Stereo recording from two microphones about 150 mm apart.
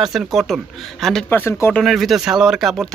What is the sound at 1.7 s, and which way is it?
Speech, centre (ahead or behind).